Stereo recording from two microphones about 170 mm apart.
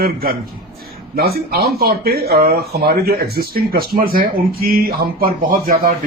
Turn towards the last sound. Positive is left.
turn(degrees=-60)  # may be behind; listen again after turning